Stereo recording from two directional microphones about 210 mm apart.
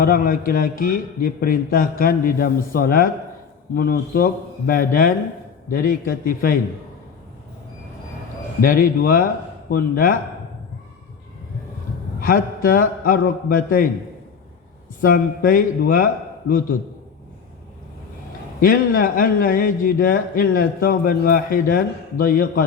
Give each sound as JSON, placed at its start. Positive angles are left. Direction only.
{"t": 0.0, "sound": "speech", "side_deg": 40}
{"t": 8.6, "sound": "speech", "side_deg": 40}
{"t": 12.2, "sound": "speech", "side_deg": 40}
{"t": 15.0, "sound": "speech", "side_deg": 45}
{"t": 18.6, "sound": "speech", "side_deg": 40}